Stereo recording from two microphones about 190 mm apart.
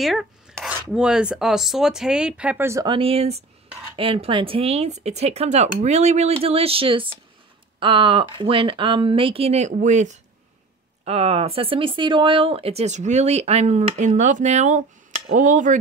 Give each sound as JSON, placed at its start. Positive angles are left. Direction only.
{"t": 0.0, "sound": "chopping", "side_deg": 0}
{"t": 0.9, "sound": "speech", "side_deg": -5}
{"t": 11.1, "sound": "speech", "side_deg": -30}